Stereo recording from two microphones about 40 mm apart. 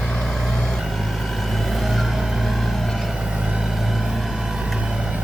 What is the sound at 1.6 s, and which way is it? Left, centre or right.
Music, centre.